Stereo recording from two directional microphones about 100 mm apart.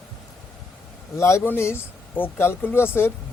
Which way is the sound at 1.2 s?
25° left (ahead or behind).